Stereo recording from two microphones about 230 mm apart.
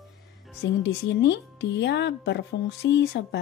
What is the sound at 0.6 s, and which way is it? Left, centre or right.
Speech, left.